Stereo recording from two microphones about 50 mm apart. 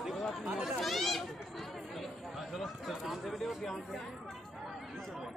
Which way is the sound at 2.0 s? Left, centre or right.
Centre.